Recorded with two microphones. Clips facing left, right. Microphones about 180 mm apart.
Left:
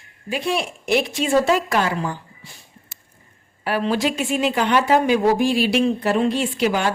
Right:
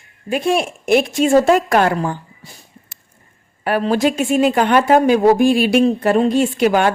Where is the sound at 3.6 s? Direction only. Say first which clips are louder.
Right 5 dB; 50° right (ahead or behind).